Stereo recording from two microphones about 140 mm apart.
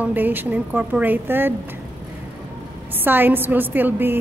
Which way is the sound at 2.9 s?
15° right (ahead or behind).